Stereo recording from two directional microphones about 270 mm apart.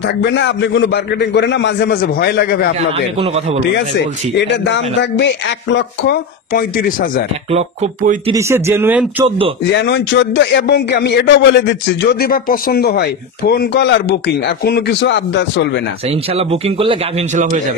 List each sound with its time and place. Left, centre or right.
0.2 s a man's voice: left
4.4 s a man's voice: left
7.5 s speech: right
8.3 s speech: centre
9.7 s a man's voice: left
16.3 s speech: right